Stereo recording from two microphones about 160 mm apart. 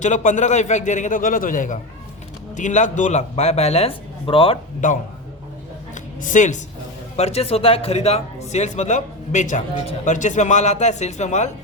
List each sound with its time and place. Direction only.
0.0 s speech: 50° left (ahead or behind); by 4.5 s 35° left (ahead or behind)
4.8 s a man's voice: 55° left (ahead or behind)
5.9 s a sound: 50° left (ahead or behind)
7.2 s speech: 40° left (ahead or behind)